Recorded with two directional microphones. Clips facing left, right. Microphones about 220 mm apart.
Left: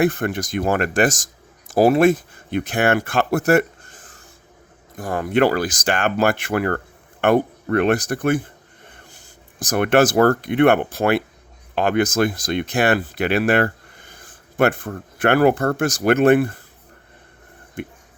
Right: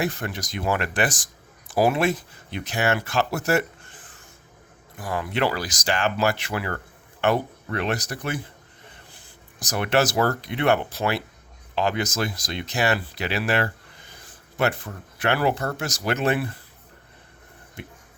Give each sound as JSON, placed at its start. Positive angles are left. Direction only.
{"t": 0.0, "sound": "speech", "side_deg": 55}
{"t": 17.8, "sound": "speech", "side_deg": 50}